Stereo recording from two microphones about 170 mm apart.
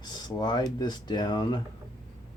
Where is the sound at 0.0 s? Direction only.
25° left (ahead or behind).